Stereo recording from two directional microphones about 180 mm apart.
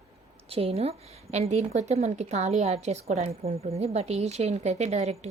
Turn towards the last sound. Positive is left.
turn(degrees=-35)  # may be behind; listen again after turning